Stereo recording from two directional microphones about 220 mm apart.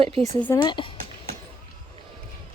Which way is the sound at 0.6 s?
20° left (ahead or behind).